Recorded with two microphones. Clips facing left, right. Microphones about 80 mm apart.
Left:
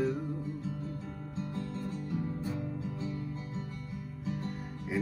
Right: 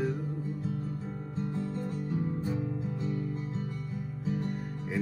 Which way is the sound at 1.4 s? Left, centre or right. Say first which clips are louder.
Right 3 dB; centre.